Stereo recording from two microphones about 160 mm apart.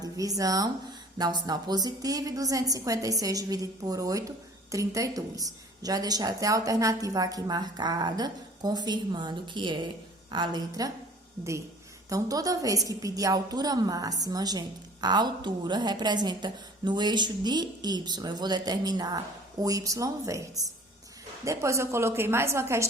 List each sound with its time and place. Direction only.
0.0 s a woman's voice: 20° right (ahead or behind)
12.0 s a woman's voice: 20° right (ahead or behind)
21.4 s a woman's voice: 20° right (ahead or behind)